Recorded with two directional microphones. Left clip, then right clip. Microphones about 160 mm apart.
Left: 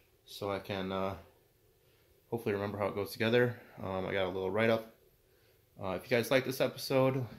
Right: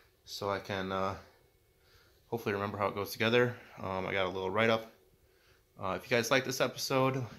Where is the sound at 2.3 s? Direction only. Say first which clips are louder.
Even; centre (ahead or behind).